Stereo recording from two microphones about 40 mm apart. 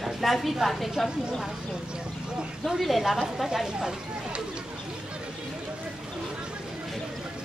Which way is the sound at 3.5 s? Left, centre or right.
Centre.